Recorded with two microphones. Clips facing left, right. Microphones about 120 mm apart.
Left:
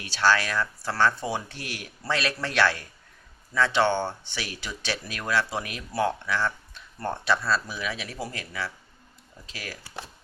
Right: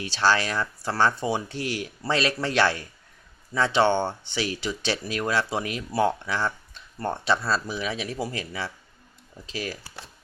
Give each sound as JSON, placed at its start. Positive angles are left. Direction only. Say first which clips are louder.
{"t": 0.0, "sound": "speech", "louder": "right 1 dB", "side_deg": -25}